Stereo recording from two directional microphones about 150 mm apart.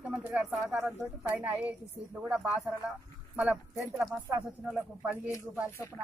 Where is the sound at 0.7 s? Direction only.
15° right (ahead or behind).